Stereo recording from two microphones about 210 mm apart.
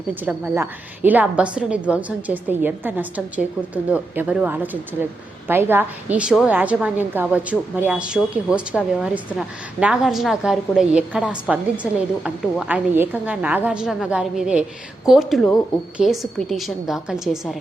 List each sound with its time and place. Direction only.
0.1 s a woman's voice: 5° right (ahead or behind)